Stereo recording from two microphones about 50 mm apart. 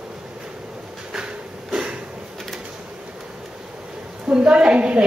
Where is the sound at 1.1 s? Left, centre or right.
Centre.